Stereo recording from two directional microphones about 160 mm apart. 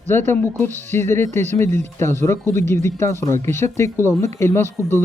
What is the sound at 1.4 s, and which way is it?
Speech, 45° right (ahead or behind).